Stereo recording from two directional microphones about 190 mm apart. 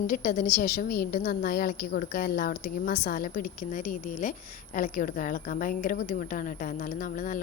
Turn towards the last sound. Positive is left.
turn(degrees=45)  # may be behind; listen again after turning